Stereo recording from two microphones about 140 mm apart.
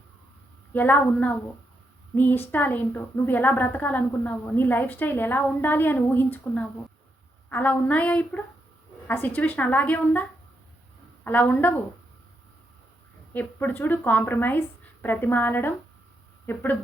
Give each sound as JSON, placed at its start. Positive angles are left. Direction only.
{"t": 0.7, "sound": "a woman's voice", "side_deg": 15}
{"t": 13.3, "sound": "a woman's voice", "side_deg": 10}